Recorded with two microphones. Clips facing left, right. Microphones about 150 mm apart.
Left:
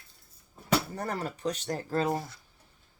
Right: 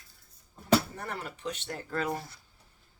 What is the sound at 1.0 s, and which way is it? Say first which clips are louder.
Speech: left 5 dB; 40° left (ahead or behind).